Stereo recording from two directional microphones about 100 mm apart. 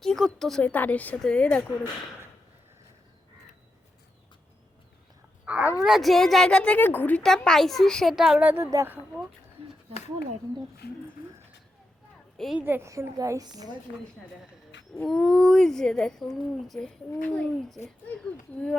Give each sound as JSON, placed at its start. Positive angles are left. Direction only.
{"t": 0.0, "sound": "speech", "side_deg": 5}
{"t": 0.6, "sound": "speech", "side_deg": 15}
{"t": 5.5, "sound": "speech", "side_deg": -15}
{"t": 5.8, "sound": "speech", "side_deg": 0}
{"t": 7.4, "sound": "speech", "side_deg": 5}
{"t": 8.4, "sound": "a woman's voice", "side_deg": -20}
{"t": 12.5, "sound": "a woman's voice", "side_deg": -20}
{"t": 15.0, "sound": "speech", "side_deg": 5}
{"t": 17.1, "sound": "speech", "side_deg": 15}
{"t": 17.6, "sound": "speech", "side_deg": 5}